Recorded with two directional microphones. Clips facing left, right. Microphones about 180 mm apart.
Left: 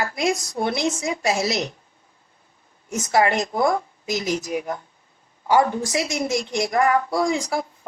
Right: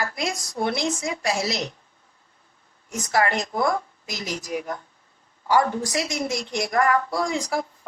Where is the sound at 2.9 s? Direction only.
20° left (ahead or behind).